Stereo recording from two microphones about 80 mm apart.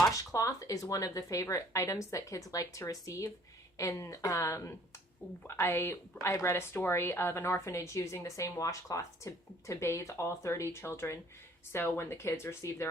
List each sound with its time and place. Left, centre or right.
0.3 s a woman's voice: left